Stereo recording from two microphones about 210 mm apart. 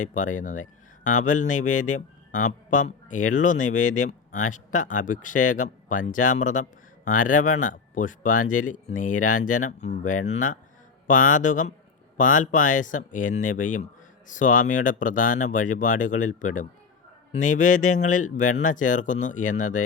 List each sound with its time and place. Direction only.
0.0 s speech: 35° left (ahead or behind)